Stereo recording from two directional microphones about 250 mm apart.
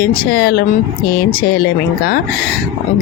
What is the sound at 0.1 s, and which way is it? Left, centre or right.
Speech, left.